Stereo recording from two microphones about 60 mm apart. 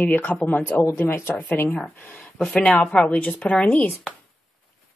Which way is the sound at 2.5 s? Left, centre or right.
Centre.